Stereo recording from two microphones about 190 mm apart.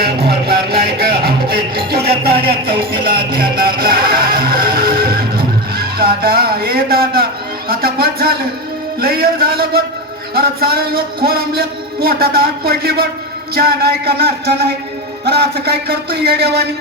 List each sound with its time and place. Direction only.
0.0 s music: 55° right (ahead or behind)
9.0 s speech: 50° right (ahead or behind)